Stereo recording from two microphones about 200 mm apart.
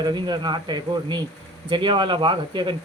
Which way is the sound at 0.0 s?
20° right (ahead or behind).